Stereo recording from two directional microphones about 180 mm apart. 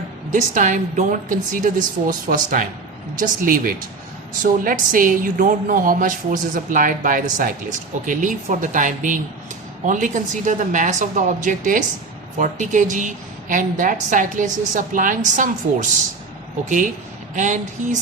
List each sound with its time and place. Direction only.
0.3 s a woman's voice: 45° right (ahead or behind)
17.3 s a woman's voice: 45° right (ahead or behind)